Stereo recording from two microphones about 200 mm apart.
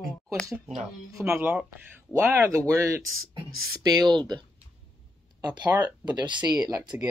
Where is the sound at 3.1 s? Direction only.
90° right.